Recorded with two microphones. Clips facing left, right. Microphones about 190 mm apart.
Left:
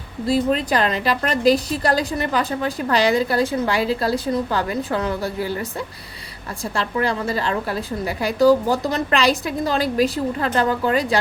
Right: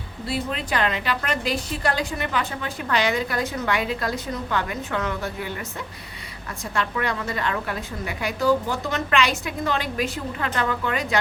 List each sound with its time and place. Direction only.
0.3 s a woman's voice: 40° left (ahead or behind)
6.7 s a woman's voice: 30° left (ahead or behind)